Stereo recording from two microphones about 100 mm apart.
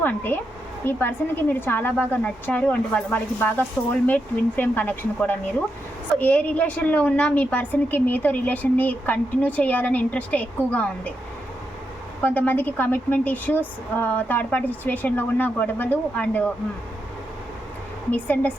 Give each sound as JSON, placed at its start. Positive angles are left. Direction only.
{"t": 0.0, "sound": "a woman's voice", "side_deg": 20}
{"t": 12.2, "sound": "a woman's voice", "side_deg": 15}
{"t": 18.1, "sound": "a woman's voice", "side_deg": 15}